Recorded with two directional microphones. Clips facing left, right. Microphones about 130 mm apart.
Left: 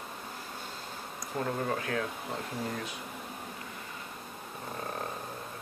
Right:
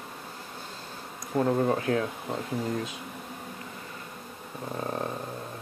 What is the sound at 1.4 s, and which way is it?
Speech, 30° right (ahead or behind).